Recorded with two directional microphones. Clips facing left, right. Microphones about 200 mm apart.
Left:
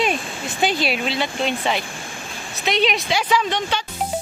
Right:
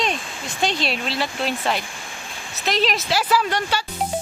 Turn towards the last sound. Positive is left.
turn(degrees=-10)  # may be behind; listen again after turning